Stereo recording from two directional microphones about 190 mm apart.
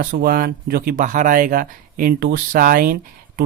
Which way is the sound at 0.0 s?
50° right (ahead or behind).